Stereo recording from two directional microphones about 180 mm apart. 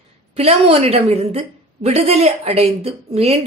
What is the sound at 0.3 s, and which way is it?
A woman's voice, 35° right (ahead or behind).